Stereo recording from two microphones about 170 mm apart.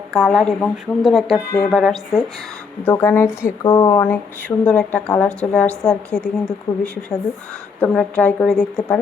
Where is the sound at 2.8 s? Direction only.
10° left (ahead or behind).